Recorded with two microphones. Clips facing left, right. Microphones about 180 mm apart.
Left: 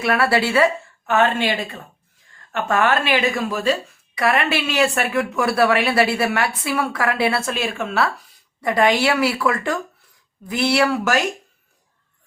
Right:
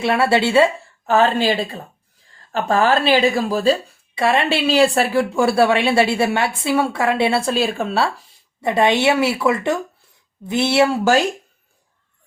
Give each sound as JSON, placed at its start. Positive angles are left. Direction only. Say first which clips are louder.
{"t": 0.0, "sound": "speech", "louder": "right 2 dB", "side_deg": -25}